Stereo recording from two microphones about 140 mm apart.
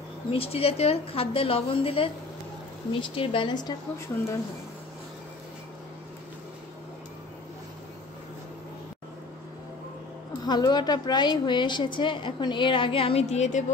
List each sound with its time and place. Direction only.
0.3 s a woman's voice: 45° left (ahead or behind)
10.4 s a woman's voice: 30° left (ahead or behind); by 13.7 s 55° left (ahead or behind)